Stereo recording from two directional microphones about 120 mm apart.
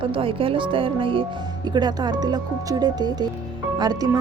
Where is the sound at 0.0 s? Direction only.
50° right (ahead or behind).